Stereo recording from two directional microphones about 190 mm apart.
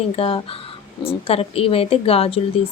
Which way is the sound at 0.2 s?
30° left (ahead or behind).